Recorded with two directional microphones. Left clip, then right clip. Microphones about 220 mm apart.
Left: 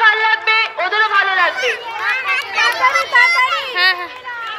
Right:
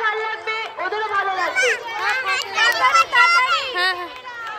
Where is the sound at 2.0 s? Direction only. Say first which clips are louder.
Left 3 dB; 55° right (ahead or behind).